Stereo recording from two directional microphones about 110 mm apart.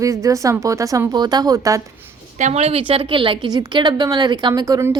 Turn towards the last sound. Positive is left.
turn(degrees=-30)  # may be behind; listen again after turning